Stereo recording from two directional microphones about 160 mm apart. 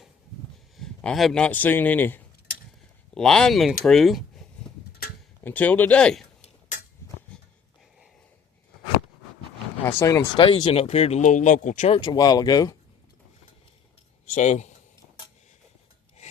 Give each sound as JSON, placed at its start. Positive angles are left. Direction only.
{"t": 0.8, "sound": "speech", "side_deg": 0}
{"t": 5.4, "sound": "speech", "side_deg": 10}
{"t": 9.8, "sound": "speech", "side_deg": 15}
{"t": 10.3, "sound": "speech", "side_deg": 30}
{"t": 10.6, "sound": "speech", "side_deg": 40}
{"t": 11.9, "sound": "speech", "side_deg": 25}
{"t": 14.3, "sound": "speech", "side_deg": 50}